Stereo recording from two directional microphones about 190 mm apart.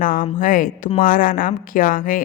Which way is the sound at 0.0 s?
45° left (ahead or behind).